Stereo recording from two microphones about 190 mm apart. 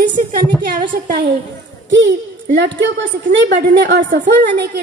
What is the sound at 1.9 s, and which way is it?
A woman's voice, 70° right (ahead or behind).